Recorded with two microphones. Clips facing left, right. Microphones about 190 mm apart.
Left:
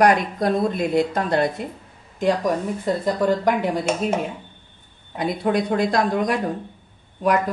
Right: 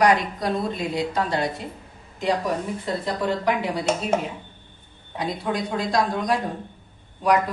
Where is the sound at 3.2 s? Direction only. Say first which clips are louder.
Left 3 dB; 45° left (ahead or behind).